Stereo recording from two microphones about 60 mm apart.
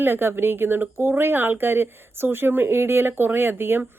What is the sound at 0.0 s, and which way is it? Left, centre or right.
Speech, right.